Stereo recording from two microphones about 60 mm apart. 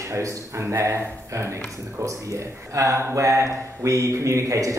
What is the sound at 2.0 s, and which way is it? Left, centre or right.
Speech, right.